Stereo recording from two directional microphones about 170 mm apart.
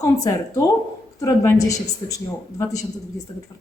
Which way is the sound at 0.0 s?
20° left (ahead or behind).